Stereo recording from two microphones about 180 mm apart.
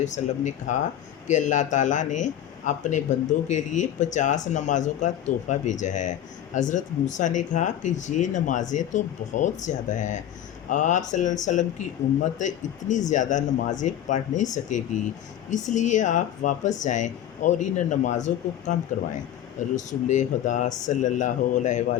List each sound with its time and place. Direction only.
0.0 s speech: 40° left (ahead or behind)
19.7 s speech: 40° left (ahead or behind)